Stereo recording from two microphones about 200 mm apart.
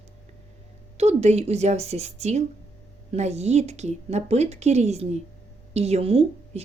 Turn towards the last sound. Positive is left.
turn(degrees=-30)  # may be behind; listen again after turning